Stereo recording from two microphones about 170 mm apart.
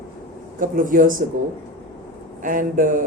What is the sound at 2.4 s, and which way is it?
Speech, 50° right (ahead or behind).